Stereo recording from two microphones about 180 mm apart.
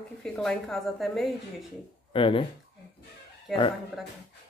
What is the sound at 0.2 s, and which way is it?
A woman's voice, 5° left (ahead or behind).